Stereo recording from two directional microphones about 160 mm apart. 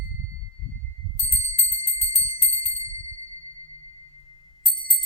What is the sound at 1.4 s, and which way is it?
Bell, 40° left (ahead or behind).